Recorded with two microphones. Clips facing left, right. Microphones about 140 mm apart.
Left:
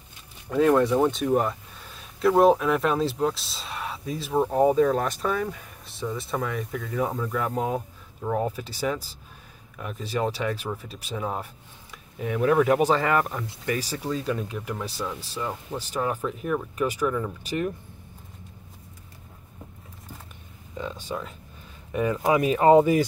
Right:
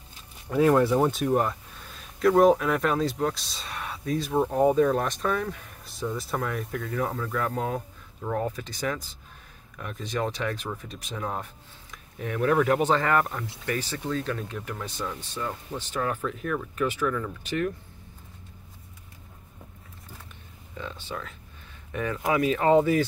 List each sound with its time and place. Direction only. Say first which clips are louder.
0.5 s speech: left 1 dB; 5° right (ahead or behind)
7.1 s speech: left 1 dB; 15° left (ahead or behind)
20.7 s speech: left 4 dB; 15° left (ahead or behind)